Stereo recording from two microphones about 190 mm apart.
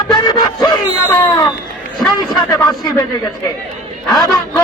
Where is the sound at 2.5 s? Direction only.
20° left (ahead or behind).